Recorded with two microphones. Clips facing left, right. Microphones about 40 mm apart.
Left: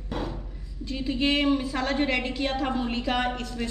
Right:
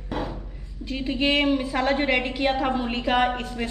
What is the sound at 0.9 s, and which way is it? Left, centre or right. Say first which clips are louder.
A woman's voice: right 2 dB; right.